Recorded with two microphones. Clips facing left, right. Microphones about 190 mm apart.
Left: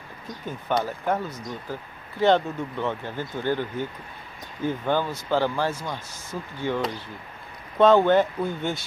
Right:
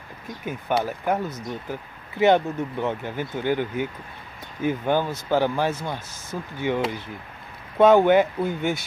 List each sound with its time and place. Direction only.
0.5 s speech: 15° right (ahead or behind)